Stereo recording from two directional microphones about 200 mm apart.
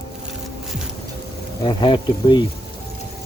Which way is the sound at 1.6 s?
20° left (ahead or behind).